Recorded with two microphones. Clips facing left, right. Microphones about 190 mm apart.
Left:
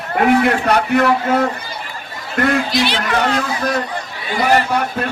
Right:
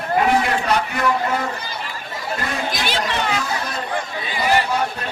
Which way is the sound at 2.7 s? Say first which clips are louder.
Left 6 dB; 45° right (ahead or behind).